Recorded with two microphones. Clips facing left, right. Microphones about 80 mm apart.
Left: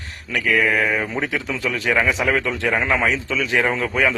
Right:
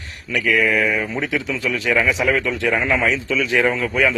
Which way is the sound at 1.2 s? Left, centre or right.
Left.